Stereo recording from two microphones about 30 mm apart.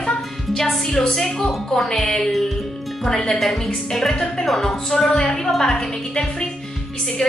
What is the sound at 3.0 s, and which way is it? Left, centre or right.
Speech, centre.